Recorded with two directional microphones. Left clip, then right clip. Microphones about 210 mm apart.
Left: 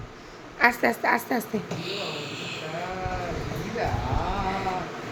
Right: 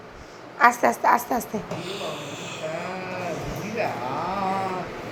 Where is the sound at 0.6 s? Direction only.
20° left (ahead or behind).